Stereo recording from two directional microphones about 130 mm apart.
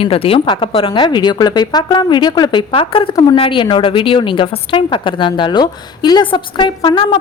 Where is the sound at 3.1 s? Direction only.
30° left (ahead or behind).